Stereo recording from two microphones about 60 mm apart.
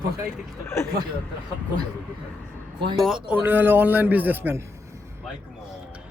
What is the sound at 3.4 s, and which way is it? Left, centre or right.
A man's voice, right.